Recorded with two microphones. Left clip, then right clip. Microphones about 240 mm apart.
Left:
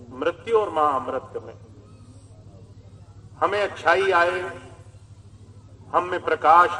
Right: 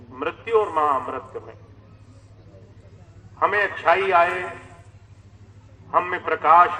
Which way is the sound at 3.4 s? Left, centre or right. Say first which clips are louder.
Right 2 dB; left.